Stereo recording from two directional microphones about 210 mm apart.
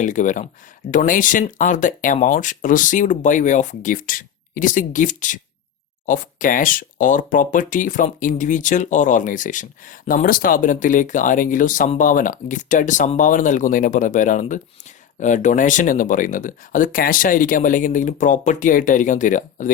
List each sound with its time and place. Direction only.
0.0 s speech: 35° left (ahead or behind)